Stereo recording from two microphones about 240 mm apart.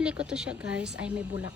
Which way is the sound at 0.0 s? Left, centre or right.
Centre.